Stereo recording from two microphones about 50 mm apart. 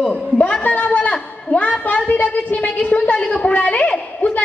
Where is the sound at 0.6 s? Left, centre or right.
Left.